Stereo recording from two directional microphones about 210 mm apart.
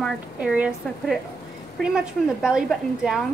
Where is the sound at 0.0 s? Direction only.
5° right (ahead or behind).